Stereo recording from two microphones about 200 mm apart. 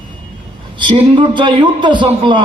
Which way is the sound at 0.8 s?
25° right (ahead or behind).